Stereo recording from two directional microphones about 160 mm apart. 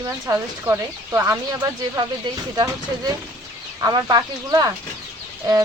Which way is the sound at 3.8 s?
25° right (ahead or behind).